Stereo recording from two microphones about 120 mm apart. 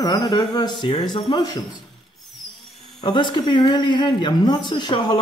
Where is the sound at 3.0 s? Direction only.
40° left (ahead or behind).